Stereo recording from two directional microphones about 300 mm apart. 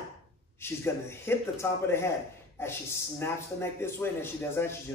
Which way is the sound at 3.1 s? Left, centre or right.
Centre.